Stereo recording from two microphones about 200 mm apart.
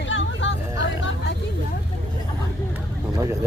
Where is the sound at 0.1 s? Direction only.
65° left (ahead or behind).